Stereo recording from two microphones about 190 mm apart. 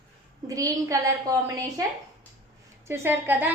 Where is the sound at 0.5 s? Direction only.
15° right (ahead or behind).